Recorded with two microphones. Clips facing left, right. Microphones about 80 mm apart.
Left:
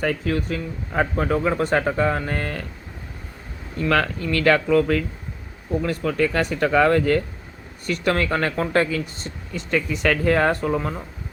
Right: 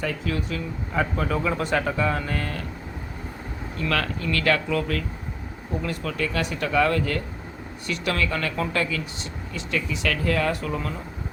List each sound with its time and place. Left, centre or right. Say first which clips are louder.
0.0 s speech: left 5 dB; left
3.8 s speech: left 5 dB; left